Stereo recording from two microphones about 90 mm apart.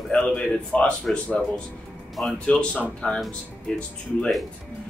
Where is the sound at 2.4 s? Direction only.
10° left (ahead or behind).